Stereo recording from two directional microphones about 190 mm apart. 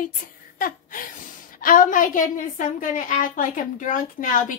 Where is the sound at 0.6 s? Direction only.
45° left (ahead or behind).